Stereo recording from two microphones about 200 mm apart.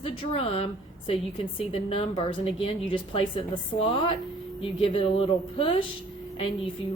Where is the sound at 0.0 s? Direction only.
30° left (ahead or behind).